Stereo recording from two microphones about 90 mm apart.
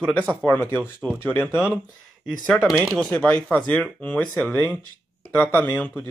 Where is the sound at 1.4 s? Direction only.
10° right (ahead or behind).